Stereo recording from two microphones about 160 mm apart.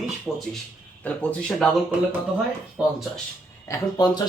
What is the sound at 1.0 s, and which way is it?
Speech, 10° left (ahead or behind).